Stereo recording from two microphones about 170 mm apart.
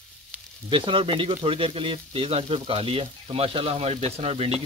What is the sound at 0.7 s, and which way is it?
Speech, 30° right (ahead or behind).